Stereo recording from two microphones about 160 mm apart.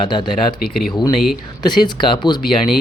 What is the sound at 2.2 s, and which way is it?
Speech, 25° left (ahead or behind).